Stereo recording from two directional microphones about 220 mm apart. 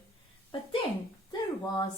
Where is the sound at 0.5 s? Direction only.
25° left (ahead or behind).